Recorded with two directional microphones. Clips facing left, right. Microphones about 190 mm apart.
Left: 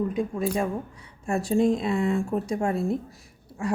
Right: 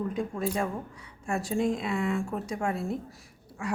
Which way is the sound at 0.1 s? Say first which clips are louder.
Left 4 dB; 15° left (ahead or behind).